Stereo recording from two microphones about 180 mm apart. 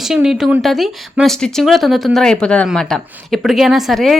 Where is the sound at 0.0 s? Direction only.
5° right (ahead or behind).